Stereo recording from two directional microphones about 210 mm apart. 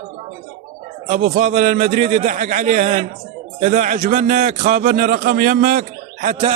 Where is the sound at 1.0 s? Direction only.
35° right (ahead or behind).